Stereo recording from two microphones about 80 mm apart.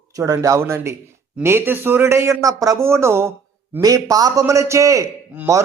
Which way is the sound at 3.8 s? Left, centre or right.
Right.